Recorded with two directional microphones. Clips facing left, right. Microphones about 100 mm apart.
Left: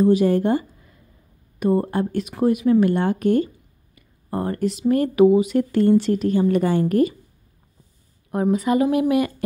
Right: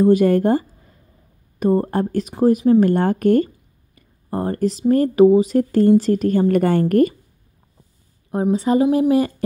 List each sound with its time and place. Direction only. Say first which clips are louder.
0.0 s speech: right 3 dB; 50° right (ahead or behind); by 2.9 s 35° right (ahead or behind)
2.9 s speech: right 3 dB; 45° right (ahead or behind)
3.9 s speech: right 2 dB; 30° right (ahead or behind); by 7.2 s 50° right (ahead or behind)
8.3 s a woman's voice: right 2 dB; 25° right (ahead or behind)